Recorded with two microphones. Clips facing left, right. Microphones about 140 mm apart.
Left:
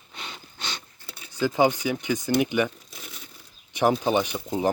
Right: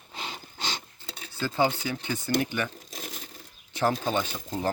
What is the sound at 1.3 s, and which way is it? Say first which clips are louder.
Speech: left 5 dB; 15° left (ahead or behind).